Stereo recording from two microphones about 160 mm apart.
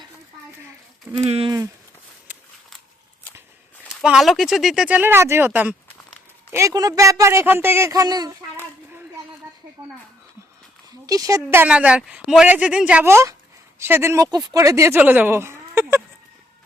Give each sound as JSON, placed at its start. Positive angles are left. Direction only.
{"t": 1.1, "sound": "speech", "side_deg": -35}
{"t": 3.8, "sound": "speech", "side_deg": -5}
{"t": 6.5, "sound": "speech", "side_deg": -20}
{"t": 11.0, "sound": "a woman's voice", "side_deg": -20}